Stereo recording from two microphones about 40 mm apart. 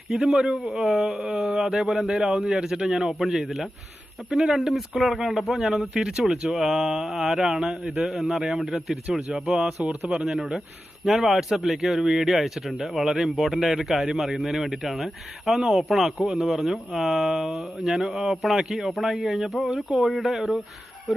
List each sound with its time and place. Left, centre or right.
0.1 s speech: centre
11.0 s speech: centre
19.6 s speech: centre
20.1 s speech: centre